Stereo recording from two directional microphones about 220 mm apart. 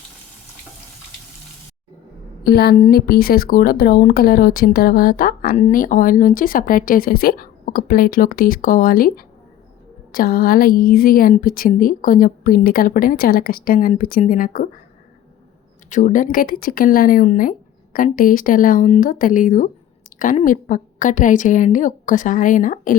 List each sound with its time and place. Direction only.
2.4 s a woman's voice: 45° left (ahead or behind)
15.9 s speech: 35° left (ahead or behind)